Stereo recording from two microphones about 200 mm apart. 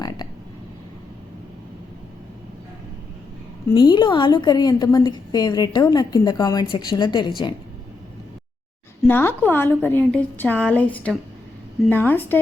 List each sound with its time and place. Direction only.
3.8 s a woman's voice: 20° left (ahead or behind)
9.0 s a woman's voice: 10° left (ahead or behind)